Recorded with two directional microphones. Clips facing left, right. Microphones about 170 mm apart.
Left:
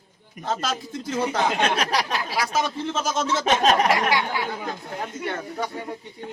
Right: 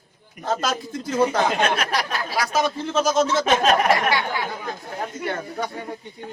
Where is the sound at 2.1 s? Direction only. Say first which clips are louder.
Right 1 dB; 45° right (ahead or behind).